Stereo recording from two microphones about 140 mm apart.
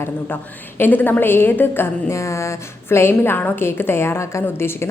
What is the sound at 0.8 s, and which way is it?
A woman's voice, 15° left (ahead or behind).